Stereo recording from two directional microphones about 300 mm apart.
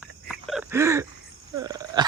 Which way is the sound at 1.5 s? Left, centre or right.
Centre.